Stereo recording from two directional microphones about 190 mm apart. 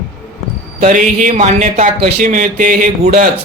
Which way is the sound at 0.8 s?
40° right (ahead or behind).